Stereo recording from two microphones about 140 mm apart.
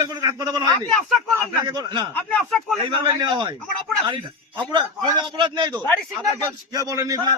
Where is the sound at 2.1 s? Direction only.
10° left (ahead or behind).